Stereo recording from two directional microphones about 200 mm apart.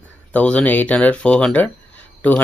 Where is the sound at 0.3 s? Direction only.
5° left (ahead or behind).